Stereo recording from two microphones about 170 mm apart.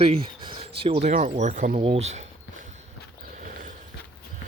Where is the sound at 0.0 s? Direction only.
30° right (ahead or behind).